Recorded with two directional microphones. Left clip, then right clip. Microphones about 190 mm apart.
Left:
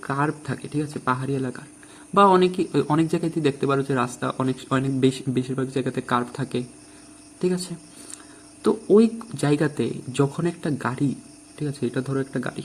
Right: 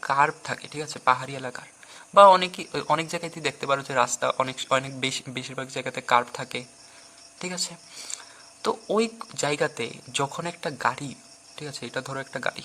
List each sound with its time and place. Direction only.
0.0 s a man's voice: 35° right (ahead or behind)